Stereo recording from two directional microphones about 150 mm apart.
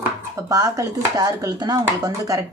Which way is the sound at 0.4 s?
25° right (ahead or behind).